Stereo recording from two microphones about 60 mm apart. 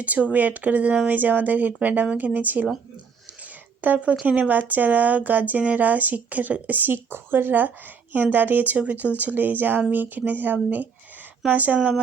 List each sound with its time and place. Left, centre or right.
0.0 s speech: right
3.8 s speech: right